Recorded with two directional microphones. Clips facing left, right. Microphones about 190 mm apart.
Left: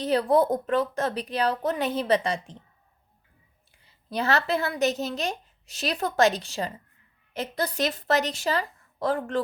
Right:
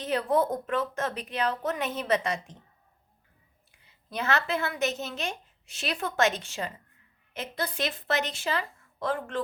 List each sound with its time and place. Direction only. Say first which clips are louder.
0.0 s a woman's voice: left 4 dB; 35° left (ahead or behind)
3.8 s a woman's voice: left 3 dB; 35° left (ahead or behind)